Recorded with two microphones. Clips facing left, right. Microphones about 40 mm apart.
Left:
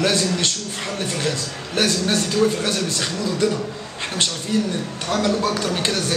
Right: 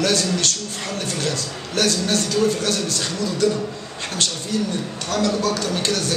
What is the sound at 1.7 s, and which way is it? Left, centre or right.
Speech, centre.